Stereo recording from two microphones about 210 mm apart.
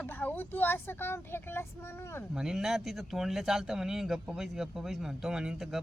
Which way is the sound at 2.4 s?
Centre (ahead or behind).